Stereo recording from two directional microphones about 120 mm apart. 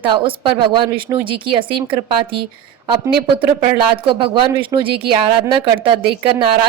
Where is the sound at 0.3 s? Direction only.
40° right (ahead or behind).